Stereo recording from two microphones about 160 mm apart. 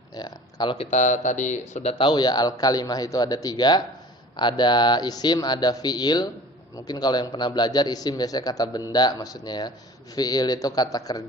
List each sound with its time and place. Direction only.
0.1 s speech: 25° left (ahead or behind)
0.9 s a man's voice: 50° left (ahead or behind); by 11.2 s 25° left (ahead or behind)